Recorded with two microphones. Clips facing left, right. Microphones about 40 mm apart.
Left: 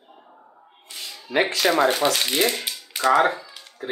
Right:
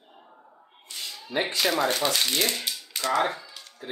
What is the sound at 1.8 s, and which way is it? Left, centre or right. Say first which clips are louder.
Speech: left 4 dB; centre.